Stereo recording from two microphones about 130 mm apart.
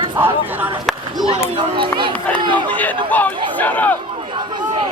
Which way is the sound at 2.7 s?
10° left (ahead or behind).